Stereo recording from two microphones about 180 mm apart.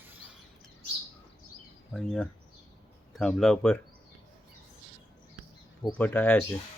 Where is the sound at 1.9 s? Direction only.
5° left (ahead or behind).